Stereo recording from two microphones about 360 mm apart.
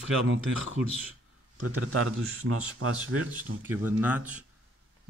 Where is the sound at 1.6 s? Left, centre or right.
Right.